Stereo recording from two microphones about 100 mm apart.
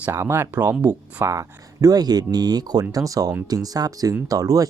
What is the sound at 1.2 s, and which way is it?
Speech, 30° right (ahead or behind).